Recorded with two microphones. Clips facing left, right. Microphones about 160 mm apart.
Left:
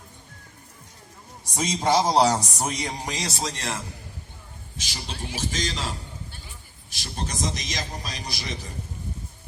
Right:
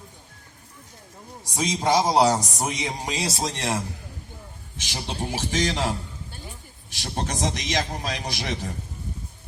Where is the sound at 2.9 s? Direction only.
15° right (ahead or behind).